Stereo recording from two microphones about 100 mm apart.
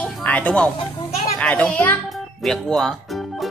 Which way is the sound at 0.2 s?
15° left (ahead or behind).